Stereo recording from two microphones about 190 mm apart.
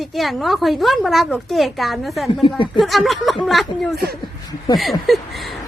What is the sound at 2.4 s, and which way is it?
Speech, 25° left (ahead or behind).